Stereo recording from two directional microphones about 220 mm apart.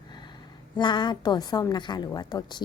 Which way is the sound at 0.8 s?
20° left (ahead or behind).